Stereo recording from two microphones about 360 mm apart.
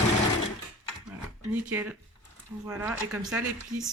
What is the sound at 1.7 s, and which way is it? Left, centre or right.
Speech, centre.